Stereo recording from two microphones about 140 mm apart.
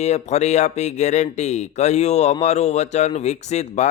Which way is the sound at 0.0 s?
50° left (ahead or behind).